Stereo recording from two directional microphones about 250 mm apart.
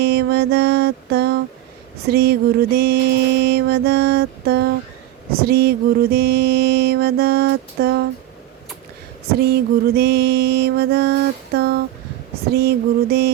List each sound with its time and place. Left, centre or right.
0.0 s mantra: right
9.3 s mantra: right